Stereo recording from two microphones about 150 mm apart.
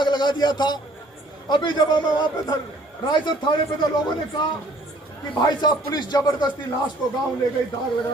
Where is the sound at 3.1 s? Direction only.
30° left (ahead or behind).